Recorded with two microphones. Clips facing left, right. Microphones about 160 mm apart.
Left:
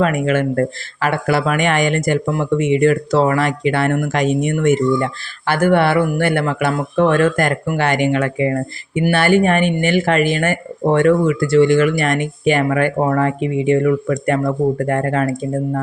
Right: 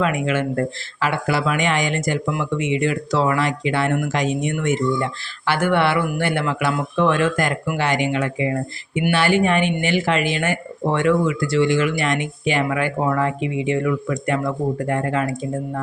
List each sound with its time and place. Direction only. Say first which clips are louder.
0.0 s speech: left 4 dB; 50° left (ahead or behind)